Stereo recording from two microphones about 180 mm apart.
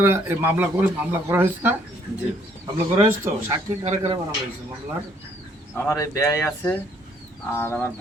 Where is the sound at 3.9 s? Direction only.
30° right (ahead or behind).